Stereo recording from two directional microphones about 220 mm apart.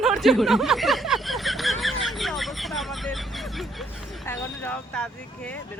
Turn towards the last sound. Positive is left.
turn(degrees=5)  # may be behind; listen again after turning